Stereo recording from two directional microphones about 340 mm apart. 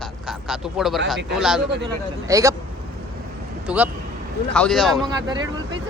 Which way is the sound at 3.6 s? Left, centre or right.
Centre.